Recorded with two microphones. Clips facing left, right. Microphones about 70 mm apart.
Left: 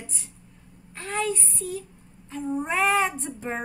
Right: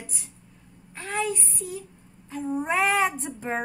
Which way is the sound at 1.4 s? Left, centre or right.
Right.